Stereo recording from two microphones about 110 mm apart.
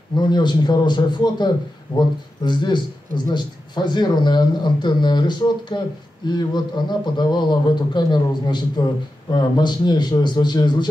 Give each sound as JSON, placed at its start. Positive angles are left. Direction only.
{"t": 0.1, "sound": "speech", "side_deg": 40}